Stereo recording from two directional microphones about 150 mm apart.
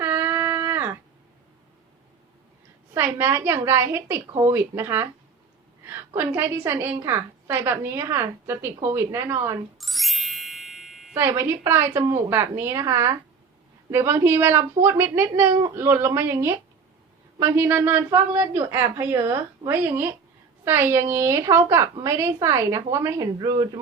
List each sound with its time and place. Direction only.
0.0 s a sound: 15° right (ahead or behind)
2.9 s a woman's voice: 15° right (ahead or behind)
9.7 s music: centre (ahead or behind)
11.1 s a woman's voice: 15° right (ahead or behind)